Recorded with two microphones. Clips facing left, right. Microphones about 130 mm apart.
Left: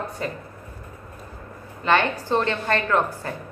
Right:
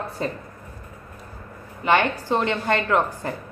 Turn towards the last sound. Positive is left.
turn(degrees=-15)  # may be behind; listen again after turning